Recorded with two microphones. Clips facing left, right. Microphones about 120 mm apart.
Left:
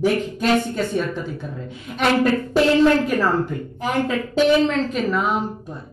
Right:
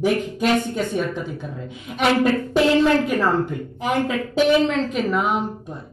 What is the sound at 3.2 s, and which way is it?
Speech, 20° right (ahead or behind).